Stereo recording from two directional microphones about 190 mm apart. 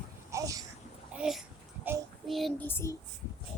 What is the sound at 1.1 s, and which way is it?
Child singing, 5° right (ahead or behind).